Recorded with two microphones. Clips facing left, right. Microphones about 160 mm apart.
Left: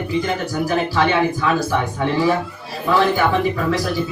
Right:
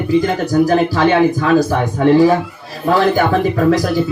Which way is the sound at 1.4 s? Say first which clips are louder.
Right 6 dB; 45° right (ahead or behind).